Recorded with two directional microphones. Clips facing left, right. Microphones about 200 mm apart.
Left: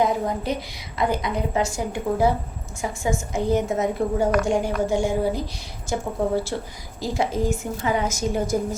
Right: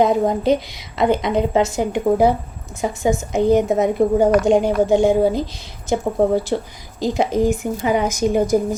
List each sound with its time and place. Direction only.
0.0 s a woman's voice: 20° right (ahead or behind)